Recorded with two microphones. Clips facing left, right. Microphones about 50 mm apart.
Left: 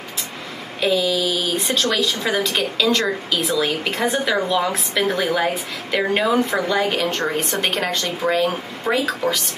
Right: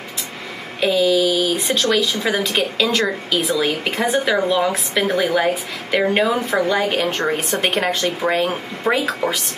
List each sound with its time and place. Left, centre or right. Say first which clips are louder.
0.7 s a woman's voice: right 3 dB; centre; by 9.4 s right